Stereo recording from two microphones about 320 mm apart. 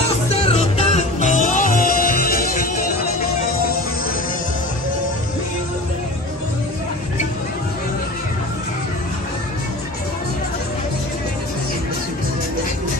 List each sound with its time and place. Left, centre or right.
0.4 s music: centre